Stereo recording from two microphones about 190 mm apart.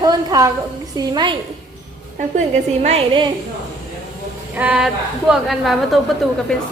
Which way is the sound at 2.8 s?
30° right (ahead or behind).